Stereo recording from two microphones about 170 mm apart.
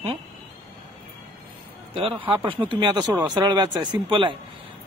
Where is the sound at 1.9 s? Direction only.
30° right (ahead or behind).